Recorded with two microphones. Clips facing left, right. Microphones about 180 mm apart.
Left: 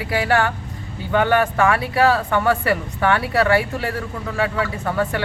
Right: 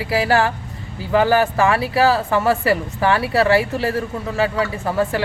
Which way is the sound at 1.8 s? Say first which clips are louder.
Right 1 dB; centre (ahead or behind).